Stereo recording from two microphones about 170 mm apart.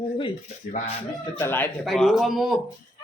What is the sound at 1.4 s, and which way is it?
Speech, 10° left (ahead or behind).